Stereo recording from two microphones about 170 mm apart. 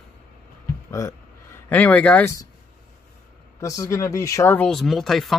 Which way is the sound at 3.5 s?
20° left (ahead or behind).